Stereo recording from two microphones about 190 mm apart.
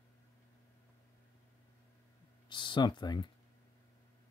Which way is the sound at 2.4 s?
25° left (ahead or behind).